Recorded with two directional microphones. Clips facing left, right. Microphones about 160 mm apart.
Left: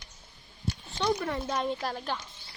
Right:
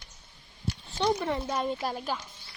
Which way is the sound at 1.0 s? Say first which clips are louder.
Right 2 dB; 25° right (ahead or behind).